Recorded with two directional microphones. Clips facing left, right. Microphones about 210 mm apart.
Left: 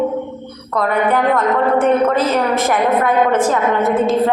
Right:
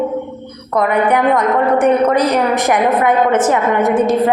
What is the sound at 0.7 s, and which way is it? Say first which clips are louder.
A woman's voice: right 2 dB; 15° right (ahead or behind).